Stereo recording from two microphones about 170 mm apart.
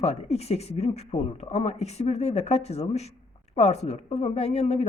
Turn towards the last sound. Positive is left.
turn(degrees=40)  # may be behind; listen again after turning